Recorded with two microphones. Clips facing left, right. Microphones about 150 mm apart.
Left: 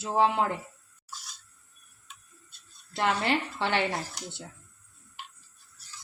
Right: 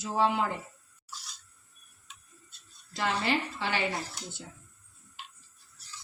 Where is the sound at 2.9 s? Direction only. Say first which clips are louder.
Left 3 dB; 60° left (ahead or behind).